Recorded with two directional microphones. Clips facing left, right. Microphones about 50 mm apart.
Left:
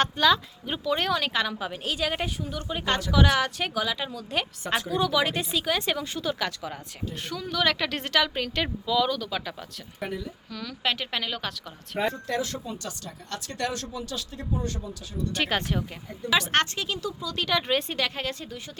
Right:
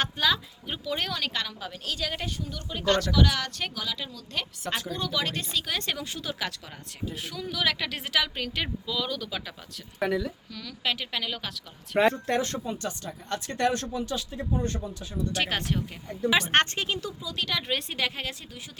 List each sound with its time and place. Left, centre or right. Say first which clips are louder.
0.0 s speech: left 4 dB; centre
1.5 s a woman's voice: left 4 dB; left
4.6 s speech: left 6 dB; centre
10.0 s speech: right 6 dB; right
10.5 s speech: left 5 dB; centre
12.1 s speech: right 2 dB; right
13.1 s speech: right 3 dB; right
15.3 s speech: left 2 dB; centre
16.4 s a woman's voice: right 1 dB; right
17.2 s speech: left 3 dB; centre
17.4 s speech: left 5 dB; centre